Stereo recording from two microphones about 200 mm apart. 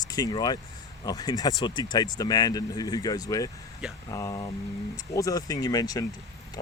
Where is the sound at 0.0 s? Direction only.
20° left (ahead or behind).